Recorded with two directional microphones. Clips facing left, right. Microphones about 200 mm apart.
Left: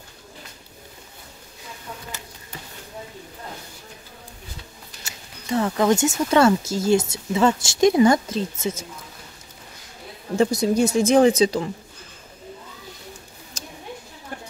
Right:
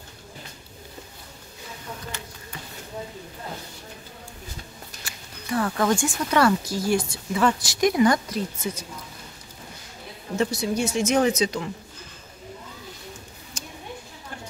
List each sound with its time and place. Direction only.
5.0 s speech: 25° left (ahead or behind)
10.3 s speech: 35° left (ahead or behind)
13.5 s a sound: 35° left (ahead or behind)